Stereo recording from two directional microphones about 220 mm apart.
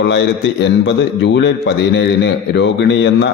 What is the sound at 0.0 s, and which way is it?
A man's voice, 55° left (ahead or behind).